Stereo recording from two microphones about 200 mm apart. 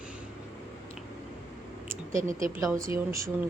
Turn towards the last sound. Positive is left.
turn(degrees=-15)  # may be behind; listen again after turning